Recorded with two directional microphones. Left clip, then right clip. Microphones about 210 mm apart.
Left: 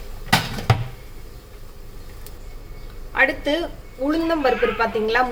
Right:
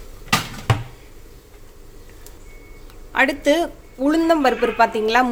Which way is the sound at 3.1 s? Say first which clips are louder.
Right 2 dB; 50° right (ahead or behind).